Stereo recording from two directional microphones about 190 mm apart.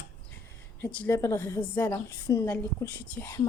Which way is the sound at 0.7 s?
10° left (ahead or behind).